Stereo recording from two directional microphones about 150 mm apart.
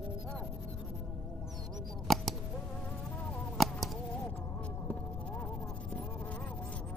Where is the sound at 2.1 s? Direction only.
Centre (ahead or behind).